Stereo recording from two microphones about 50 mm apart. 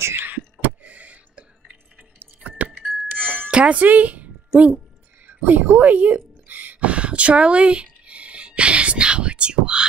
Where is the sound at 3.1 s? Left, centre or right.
Right.